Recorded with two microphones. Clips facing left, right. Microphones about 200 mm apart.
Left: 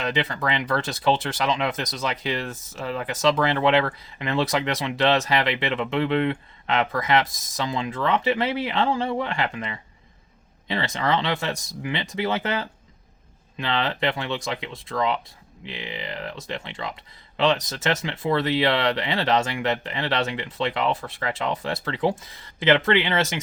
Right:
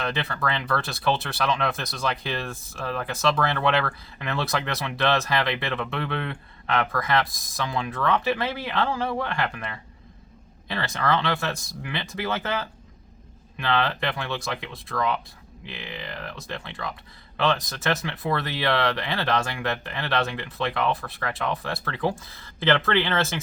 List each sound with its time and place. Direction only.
0.0 s speech: 15° left (ahead or behind)